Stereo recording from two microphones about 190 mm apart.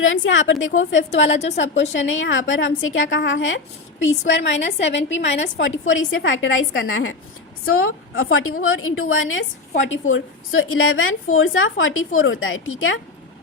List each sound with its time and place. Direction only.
0.0 s a woman's voice: 90° left
1.3 s a woman's voice: 35° left (ahead or behind)
1.9 s a woman's voice: 80° left
4.3 s a woman's voice: 70° left (ahead or behind)
5.5 s a woman's voice: 85° left